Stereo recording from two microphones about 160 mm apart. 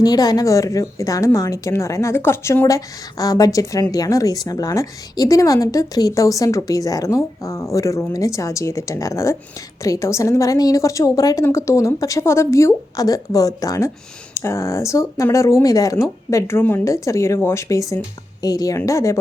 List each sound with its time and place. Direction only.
0.0 s a woman's voice: 25° left (ahead or behind)